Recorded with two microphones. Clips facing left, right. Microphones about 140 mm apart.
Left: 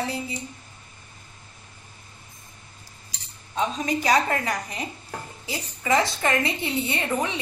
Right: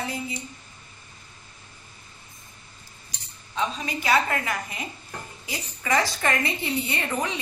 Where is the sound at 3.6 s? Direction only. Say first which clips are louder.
Left 3 dB; 45° left (ahead or behind).